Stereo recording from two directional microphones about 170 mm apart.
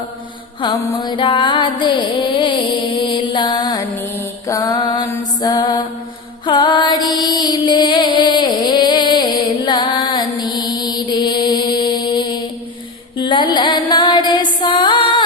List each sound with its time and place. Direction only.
0.6 s music: 25° left (ahead or behind)